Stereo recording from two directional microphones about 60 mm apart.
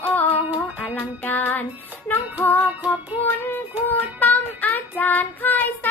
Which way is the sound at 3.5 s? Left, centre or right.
Left.